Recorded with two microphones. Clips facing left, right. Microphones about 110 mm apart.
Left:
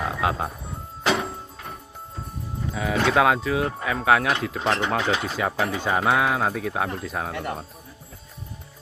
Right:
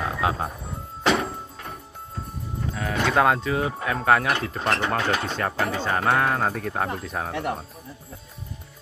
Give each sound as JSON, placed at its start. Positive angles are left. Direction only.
{"t": 0.0, "sound": "frog", "side_deg": 0}
{"t": 1.0, "sound": "music", "side_deg": 0}
{"t": 2.7, "sound": "speech", "side_deg": 5}